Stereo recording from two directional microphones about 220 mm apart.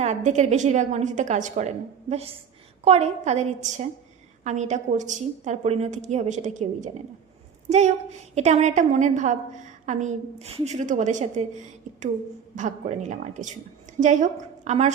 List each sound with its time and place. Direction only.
0.0 s a woman's voice: 30° right (ahead or behind)
12.5 s a woman's voice: 35° right (ahead or behind)